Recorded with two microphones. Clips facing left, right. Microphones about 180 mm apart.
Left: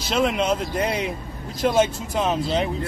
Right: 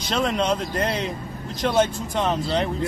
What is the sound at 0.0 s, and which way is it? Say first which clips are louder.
Speech: left 1 dB; 5° left (ahead or behind).